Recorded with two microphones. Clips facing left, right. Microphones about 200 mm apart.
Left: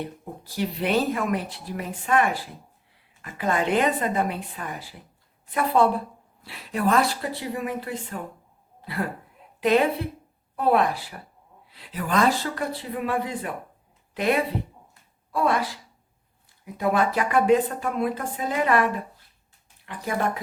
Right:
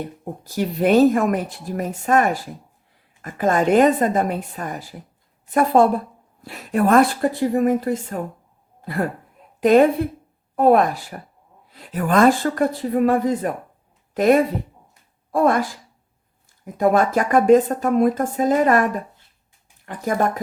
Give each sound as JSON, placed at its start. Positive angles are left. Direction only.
{"t": 0.0, "sound": "speech", "side_deg": -45}